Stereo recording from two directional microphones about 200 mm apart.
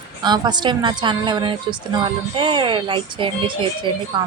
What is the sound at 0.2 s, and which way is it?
A woman's voice, 20° right (ahead or behind).